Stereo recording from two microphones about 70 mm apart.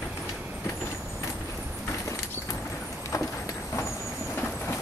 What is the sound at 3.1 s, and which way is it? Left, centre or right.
Horse, left.